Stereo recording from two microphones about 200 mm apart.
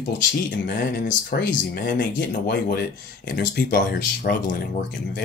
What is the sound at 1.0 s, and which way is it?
Speech, 50° left (ahead or behind).